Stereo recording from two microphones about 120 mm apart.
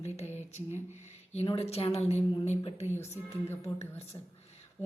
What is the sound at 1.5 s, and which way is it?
A woman's voice, 55° left (ahead or behind).